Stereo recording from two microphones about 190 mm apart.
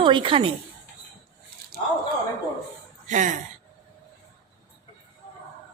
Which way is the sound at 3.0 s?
40° right (ahead or behind).